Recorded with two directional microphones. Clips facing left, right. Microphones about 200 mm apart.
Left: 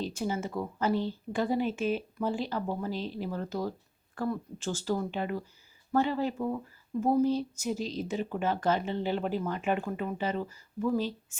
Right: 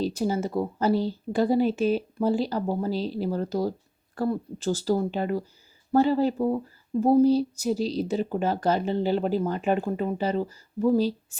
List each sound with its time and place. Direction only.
0.0 s a woman's voice: 35° right (ahead or behind)